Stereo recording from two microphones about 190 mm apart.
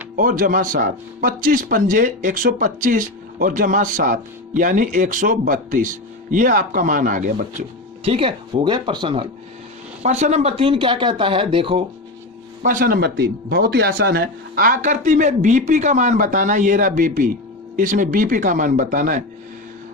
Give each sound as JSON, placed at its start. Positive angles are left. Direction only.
{"t": 0.2, "sound": "speech", "side_deg": -45}
{"t": 8.0, "sound": "speech", "side_deg": -30}
{"t": 10.0, "sound": "speech", "side_deg": -35}
{"t": 12.6, "sound": "speech", "side_deg": -45}